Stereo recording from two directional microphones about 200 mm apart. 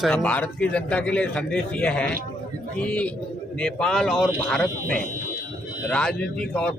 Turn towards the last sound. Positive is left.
turn(degrees=5)  # may be behind; listen again after turning